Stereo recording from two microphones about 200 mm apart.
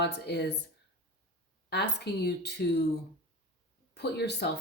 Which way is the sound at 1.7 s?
55° left (ahead or behind).